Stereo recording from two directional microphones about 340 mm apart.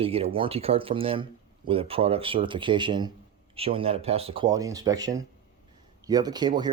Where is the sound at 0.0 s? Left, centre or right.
Centre.